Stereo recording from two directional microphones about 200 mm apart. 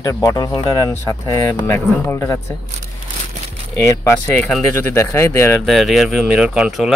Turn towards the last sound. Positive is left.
turn(degrees=-5)  # may be behind; listen again after turning